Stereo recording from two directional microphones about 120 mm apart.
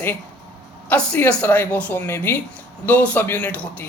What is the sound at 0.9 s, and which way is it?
Speech, 10° left (ahead or behind).